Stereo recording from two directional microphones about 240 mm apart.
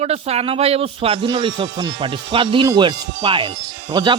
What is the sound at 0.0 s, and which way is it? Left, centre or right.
Speech, right.